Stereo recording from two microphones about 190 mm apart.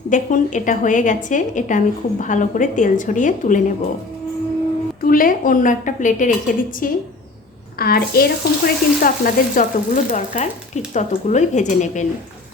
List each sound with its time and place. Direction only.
0.1 s a woman's voice: 40° left (ahead or behind)
5.0 s a woman's voice: 50° left (ahead or behind)